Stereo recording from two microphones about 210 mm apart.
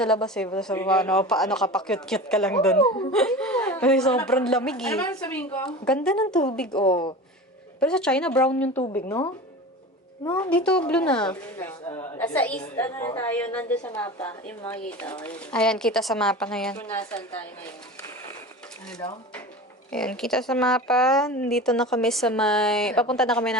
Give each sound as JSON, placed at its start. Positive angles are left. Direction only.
{"t": 0.0, "sound": "a woman's voice", "side_deg": 5}
{"t": 6.7, "sound": "a man's voice", "side_deg": 20}
{"t": 7.8, "sound": "a woman's voice", "side_deg": 5}
{"t": 10.3, "sound": "a woman's voice", "side_deg": 5}
{"t": 19.9, "sound": "a woman's voice", "side_deg": 5}